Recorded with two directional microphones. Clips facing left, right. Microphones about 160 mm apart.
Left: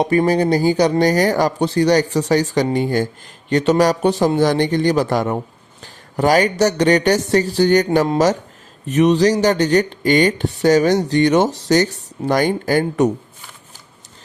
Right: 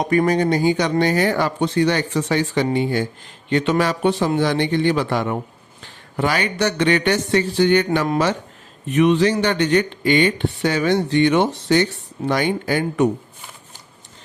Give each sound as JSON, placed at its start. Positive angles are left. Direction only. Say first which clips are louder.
{"t": 0.0, "sound": "speech", "louder": "left 2 dB", "side_deg": 30}